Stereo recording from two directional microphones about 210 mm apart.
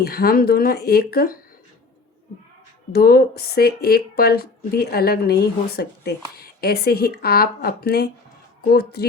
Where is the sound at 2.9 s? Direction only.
45° left (ahead or behind).